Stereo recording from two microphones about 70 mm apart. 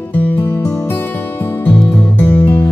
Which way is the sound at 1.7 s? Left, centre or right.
Left.